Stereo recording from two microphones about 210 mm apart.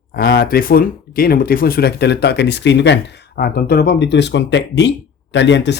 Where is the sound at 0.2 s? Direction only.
50° left (ahead or behind).